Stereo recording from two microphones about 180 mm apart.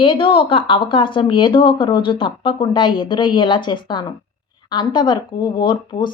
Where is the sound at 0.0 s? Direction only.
30° left (ahead or behind).